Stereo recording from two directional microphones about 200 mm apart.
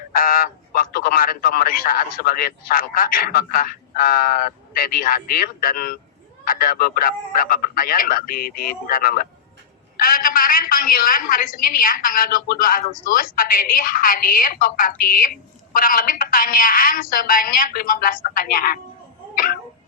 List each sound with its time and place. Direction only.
0.1 s a man's voice: 45° left (ahead or behind)